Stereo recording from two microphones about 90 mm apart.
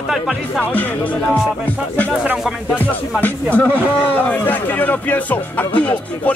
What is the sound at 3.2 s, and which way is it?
Speech, 20° left (ahead or behind).